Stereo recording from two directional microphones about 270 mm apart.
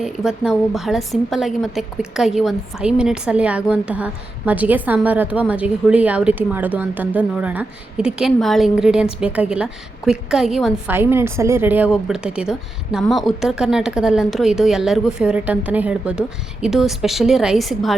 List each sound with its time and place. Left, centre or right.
0.0 s a woman's voice: centre